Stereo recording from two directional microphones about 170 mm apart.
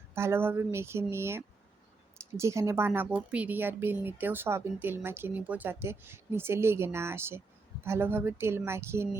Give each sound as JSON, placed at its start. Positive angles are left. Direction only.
{"t": 0.1, "sound": "speech", "side_deg": -15}